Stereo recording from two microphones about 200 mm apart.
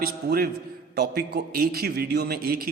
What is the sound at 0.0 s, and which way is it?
A man's voice, 50° right (ahead or behind).